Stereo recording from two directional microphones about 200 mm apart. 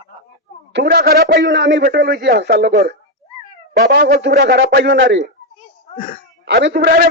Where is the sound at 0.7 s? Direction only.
55° right (ahead or behind).